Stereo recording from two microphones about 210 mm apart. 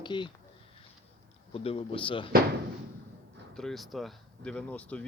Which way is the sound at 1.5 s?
25° left (ahead or behind).